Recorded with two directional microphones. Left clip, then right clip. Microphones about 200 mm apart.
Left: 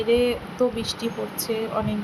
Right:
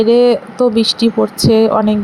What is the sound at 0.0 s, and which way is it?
Speech, 35° right (ahead or behind).